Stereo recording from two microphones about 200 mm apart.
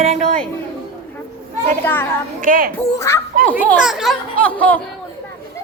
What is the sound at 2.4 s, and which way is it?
Speech, 45° right (ahead or behind).